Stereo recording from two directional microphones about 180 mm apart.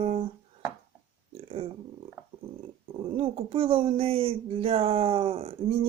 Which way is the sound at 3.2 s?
30° right (ahead or behind).